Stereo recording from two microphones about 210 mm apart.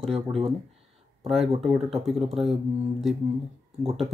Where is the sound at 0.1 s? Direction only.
25° right (ahead or behind).